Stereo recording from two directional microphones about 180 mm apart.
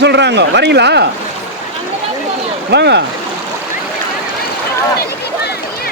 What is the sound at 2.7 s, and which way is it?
Speech, 70° right (ahead or behind).